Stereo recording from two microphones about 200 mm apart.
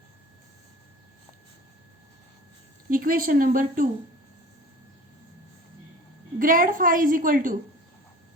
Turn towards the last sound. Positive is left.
turn(degrees=-45)  # may be behind; listen again after turning